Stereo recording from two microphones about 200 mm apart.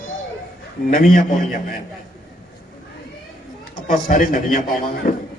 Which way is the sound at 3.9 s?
40° left (ahead or behind).